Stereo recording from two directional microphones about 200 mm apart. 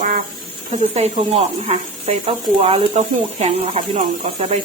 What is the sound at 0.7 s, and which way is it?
Speech, 30° right (ahead or behind).